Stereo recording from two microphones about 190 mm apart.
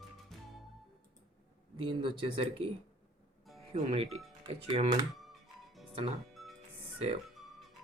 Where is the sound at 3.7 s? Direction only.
30° right (ahead or behind).